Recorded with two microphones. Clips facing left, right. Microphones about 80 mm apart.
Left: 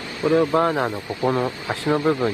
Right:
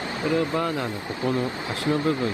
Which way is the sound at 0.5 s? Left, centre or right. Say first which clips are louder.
Left 6 dB; left.